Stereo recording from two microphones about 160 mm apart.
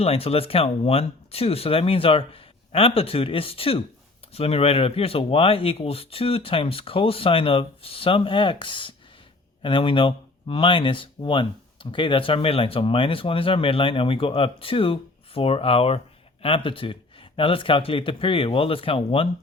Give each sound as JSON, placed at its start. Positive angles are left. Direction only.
{"t": 0.0, "sound": "speech", "side_deg": 40}